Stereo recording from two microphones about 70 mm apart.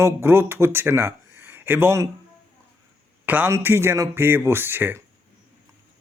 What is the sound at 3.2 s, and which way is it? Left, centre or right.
A man's voice, right.